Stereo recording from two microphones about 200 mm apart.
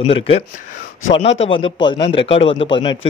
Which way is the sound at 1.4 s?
25° left (ahead or behind).